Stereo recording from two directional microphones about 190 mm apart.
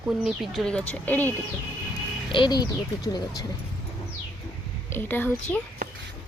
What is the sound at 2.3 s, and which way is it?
Speech, 25° left (ahead or behind).